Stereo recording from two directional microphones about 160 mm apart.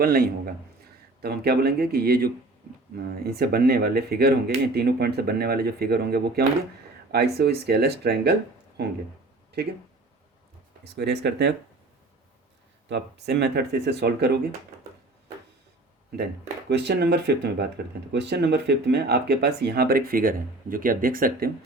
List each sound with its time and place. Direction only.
0.0 s speech: 70° right (ahead or behind)
1.2 s speech: 80° right
10.8 s speech: 90° right
12.9 s speech: 90° right
16.1 s speech: 90° right; by 21.5 s 65° right (ahead or behind)